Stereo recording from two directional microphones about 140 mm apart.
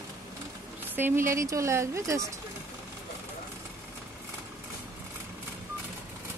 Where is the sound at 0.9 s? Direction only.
15° right (ahead or behind).